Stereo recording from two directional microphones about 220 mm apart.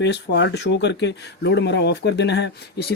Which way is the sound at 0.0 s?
50° left (ahead or behind).